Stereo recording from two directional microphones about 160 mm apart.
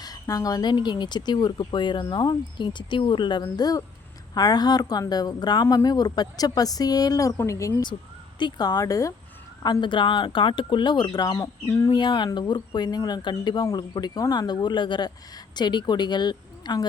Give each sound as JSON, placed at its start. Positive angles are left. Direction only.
{"t": 0.0, "sound": "speech", "side_deg": 25}